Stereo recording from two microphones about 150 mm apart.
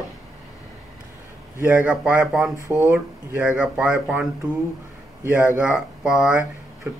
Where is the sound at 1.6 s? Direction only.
15° right (ahead or behind).